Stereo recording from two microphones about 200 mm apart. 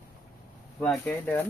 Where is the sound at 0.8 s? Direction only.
10° left (ahead or behind).